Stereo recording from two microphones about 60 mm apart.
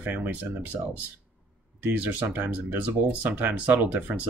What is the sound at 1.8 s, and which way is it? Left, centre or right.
Speech, right.